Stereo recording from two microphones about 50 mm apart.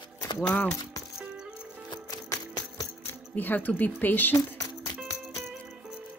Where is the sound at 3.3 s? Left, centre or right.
Left.